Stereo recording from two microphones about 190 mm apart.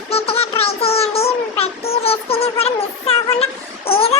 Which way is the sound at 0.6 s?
30° left (ahead or behind).